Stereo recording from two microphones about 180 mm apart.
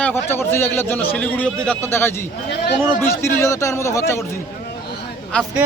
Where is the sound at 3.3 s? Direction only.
15° left (ahead or behind).